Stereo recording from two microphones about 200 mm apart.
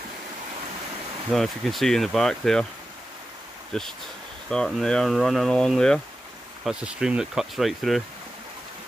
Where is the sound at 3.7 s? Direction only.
Centre (ahead or behind).